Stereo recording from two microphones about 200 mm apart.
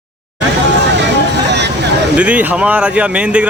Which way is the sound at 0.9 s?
60° right (ahead or behind).